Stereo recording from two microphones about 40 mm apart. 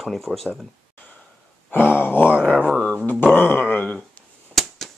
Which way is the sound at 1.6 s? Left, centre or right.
Left.